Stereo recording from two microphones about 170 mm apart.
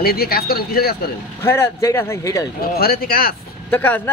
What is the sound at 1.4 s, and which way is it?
Speech, 15° left (ahead or behind).